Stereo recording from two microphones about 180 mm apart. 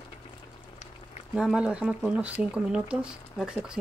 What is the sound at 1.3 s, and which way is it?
Speech, 5° right (ahead or behind).